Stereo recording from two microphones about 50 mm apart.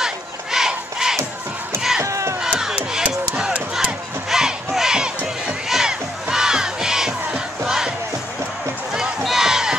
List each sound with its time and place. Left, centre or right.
0.0 s battle cry: centre
2.0 s crowd: right
2.4 s battle cry: centre
4.3 s music: centre
4.6 s crowd: centre
5.7 s battle cry: centre
9.2 s a sound: centre